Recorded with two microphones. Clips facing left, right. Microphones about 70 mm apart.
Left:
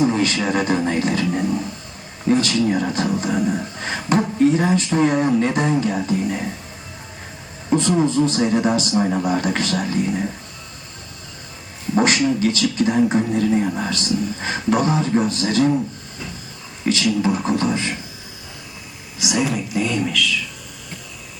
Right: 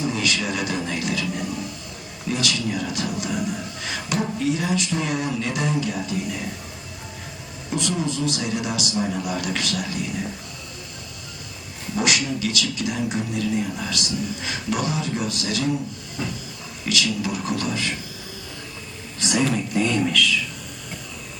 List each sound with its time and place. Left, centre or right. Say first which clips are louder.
0.0 s speech: left 6 dB; left
7.7 s speech: left 8 dB; left
11.9 s speech: left 6 dB; left
16.8 s a man's voice: left 6 dB; left
19.2 s speech: left 1 dB; centre